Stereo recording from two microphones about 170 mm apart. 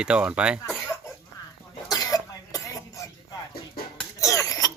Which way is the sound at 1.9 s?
20° left (ahead or behind).